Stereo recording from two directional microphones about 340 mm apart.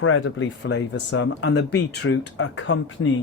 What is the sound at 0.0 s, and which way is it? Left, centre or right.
Speech, left.